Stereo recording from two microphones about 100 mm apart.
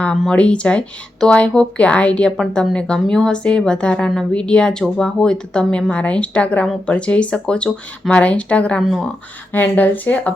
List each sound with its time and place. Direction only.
0.0 s a woman's voice: 10° left (ahead or behind)
9.5 s a woman's voice: 20° left (ahead or behind)